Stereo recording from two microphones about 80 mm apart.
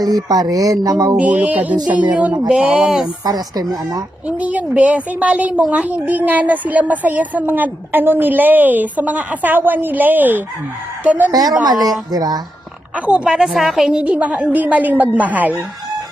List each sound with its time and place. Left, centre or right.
0.0 s speech: right
1.1 s a woman's voice: centre
3.2 s a woman's voice: right
4.3 s a woman's voice: centre
11.3 s a woman's voice: right
13.1 s a woman's voice: centre
14.0 s a woman's voice: centre